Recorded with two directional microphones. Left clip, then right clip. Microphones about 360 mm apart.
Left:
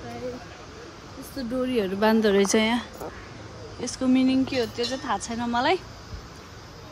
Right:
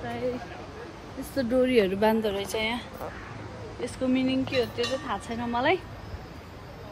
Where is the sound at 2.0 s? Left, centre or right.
Left.